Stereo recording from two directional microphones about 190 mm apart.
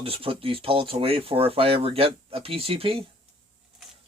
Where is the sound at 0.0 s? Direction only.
30° right (ahead or behind).